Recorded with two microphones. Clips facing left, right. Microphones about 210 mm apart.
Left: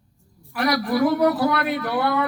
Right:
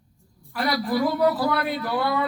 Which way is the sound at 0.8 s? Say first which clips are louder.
Left 2 dB; 70° left (ahead or behind).